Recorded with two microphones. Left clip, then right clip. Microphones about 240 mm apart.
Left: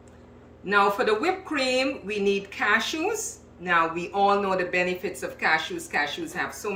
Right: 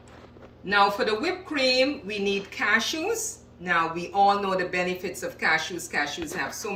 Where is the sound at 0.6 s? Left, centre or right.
Centre.